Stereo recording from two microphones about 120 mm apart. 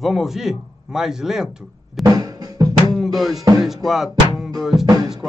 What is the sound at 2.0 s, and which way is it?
Music, 30° right (ahead or behind).